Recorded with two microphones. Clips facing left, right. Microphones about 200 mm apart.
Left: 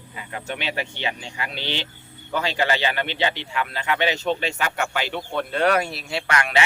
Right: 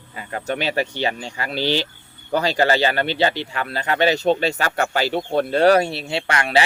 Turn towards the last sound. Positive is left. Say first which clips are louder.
# right 3 dB
turn(degrees=-35)  # may be behind; listen again after turning